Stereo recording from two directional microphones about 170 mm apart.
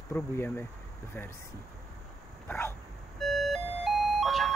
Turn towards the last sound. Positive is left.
turn(degrees=0)  # may be behind; listen again after turning